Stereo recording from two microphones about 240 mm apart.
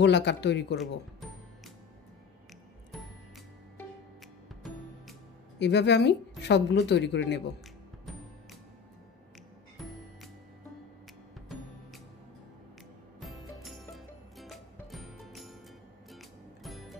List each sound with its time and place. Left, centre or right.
0.0 s a woman's voice: left
5.6 s a woman's voice: left
13.2 s music: centre